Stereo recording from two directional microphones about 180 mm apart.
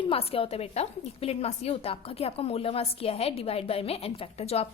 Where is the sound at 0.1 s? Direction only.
30° left (ahead or behind).